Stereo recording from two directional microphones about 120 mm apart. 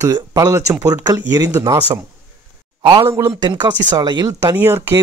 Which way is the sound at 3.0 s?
20° right (ahead or behind).